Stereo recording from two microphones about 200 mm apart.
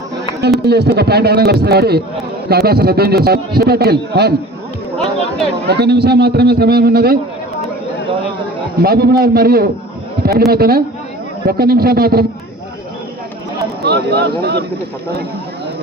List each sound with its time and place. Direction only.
0.6 s a man's voice: 55° right (ahead or behind)
5.6 s a man's voice: 55° right (ahead or behind)
8.8 s a man's voice: 50° right (ahead or behind)
13.8 s speech: 55° right (ahead or behind)